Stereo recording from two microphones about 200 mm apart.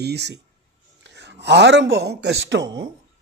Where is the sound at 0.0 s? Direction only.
55° right (ahead or behind).